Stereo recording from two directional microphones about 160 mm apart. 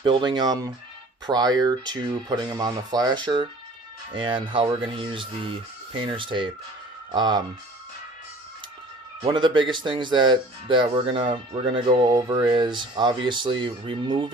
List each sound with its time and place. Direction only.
0.0 s speech: 30° right (ahead or behind)
9.2 s speech: 30° right (ahead or behind)